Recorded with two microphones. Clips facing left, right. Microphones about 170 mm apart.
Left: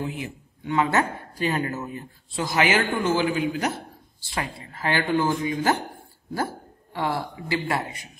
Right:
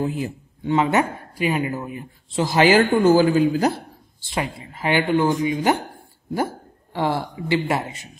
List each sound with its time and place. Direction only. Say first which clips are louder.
0.0 s speech: right 6 dB; 40° right (ahead or behind)
0.7 s speech: right 4 dB; 20° right (ahead or behind)
2.4 s a man's voice: right 7 dB; 30° right (ahead or behind)
4.2 s speech: right 5 dB; 20° right (ahead or behind)